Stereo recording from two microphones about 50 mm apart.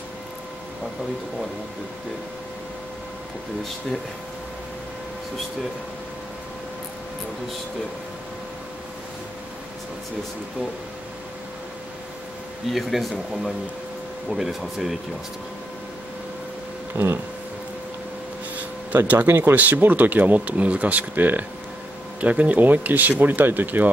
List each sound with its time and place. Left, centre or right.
12.7 s speech: centre
16.9 s speech: right
19.0 s speech: right
19.5 s speech: right